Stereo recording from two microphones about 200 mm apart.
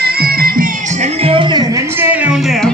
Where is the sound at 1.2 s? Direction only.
25° right (ahead or behind); by 2.7 s centre (ahead or behind).